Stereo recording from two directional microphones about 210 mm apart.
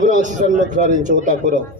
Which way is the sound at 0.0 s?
40° right (ahead or behind).